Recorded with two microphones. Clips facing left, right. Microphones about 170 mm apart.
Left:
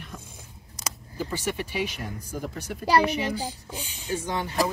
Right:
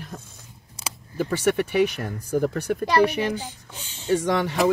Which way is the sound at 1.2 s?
65° right (ahead or behind).